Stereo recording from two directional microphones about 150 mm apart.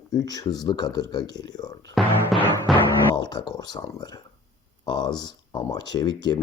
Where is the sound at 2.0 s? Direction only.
Centre (ahead or behind).